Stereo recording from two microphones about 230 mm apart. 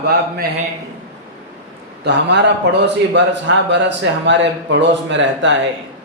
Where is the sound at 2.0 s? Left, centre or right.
Right.